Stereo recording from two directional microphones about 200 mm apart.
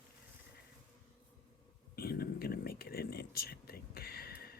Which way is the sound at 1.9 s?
50° left (ahead or behind).